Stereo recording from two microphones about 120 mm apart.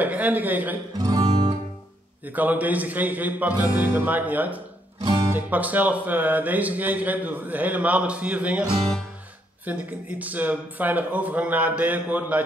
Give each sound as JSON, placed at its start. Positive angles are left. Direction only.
{"t": 0.0, "sound": "speech", "side_deg": -15}
{"t": 0.9, "sound": "music", "side_deg": -30}
{"t": 2.2, "sound": "speech", "side_deg": -15}
{"t": 9.7, "sound": "speech", "side_deg": -15}